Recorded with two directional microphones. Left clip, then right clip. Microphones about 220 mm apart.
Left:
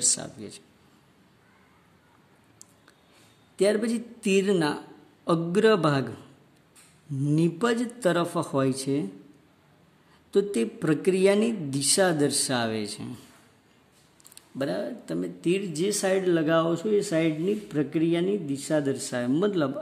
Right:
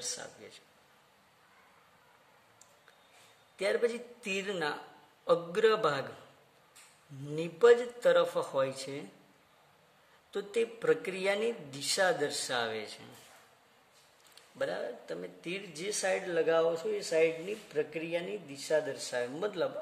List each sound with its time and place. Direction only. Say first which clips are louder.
0.2 s speech: left 7 dB; 50° left (ahead or behind)
3.5 s a man's voice: left 6 dB; 40° left (ahead or behind)
7.2 s a man's voice: right 1 dB; 40° left (ahead or behind)
10.3 s speech: left 8 dB; 40° left (ahead or behind)
14.6 s speech: left 5 dB; 50° left (ahead or behind)